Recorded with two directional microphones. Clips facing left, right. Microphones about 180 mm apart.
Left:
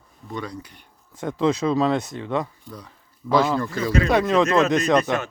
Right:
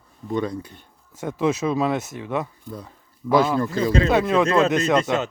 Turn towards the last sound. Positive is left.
turn(degrees=-20)  # may be behind; listen again after turning